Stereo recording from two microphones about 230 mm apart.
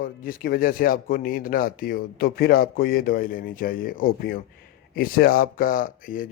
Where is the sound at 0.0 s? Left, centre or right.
Left.